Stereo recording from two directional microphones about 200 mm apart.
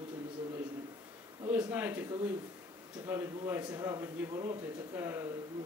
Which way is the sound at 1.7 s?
10° right (ahead or behind).